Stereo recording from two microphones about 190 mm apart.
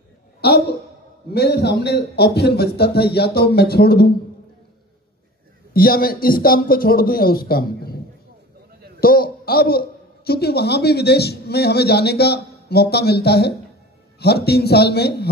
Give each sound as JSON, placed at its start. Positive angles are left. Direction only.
{"t": 0.4, "sound": "a woman's voice", "side_deg": 55}
{"t": 5.7, "sound": "a man's voice", "side_deg": 50}
{"t": 9.0, "sound": "a man's voice", "side_deg": 50}